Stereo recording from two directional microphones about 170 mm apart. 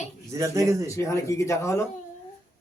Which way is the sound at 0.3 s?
20° right (ahead or behind).